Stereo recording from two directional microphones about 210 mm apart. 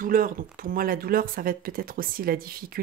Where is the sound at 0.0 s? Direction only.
40° right (ahead or behind).